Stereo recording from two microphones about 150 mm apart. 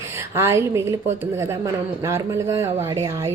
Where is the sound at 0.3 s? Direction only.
15° right (ahead or behind).